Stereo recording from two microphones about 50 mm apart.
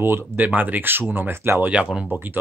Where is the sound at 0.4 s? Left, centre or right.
Right.